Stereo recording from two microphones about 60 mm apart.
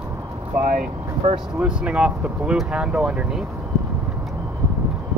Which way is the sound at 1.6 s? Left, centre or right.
Centre.